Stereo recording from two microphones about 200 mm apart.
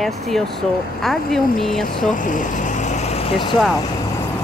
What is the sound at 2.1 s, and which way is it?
Vehicle, 40° left (ahead or behind).